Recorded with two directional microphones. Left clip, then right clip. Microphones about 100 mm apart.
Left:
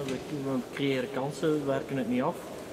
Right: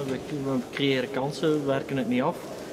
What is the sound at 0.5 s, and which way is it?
A man's voice, 15° right (ahead or behind).